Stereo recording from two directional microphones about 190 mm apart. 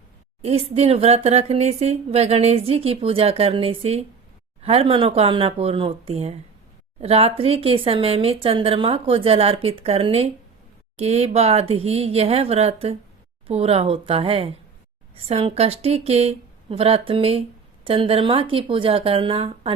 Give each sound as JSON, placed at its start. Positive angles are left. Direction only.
{"t": 0.4, "sound": "speech", "side_deg": -30}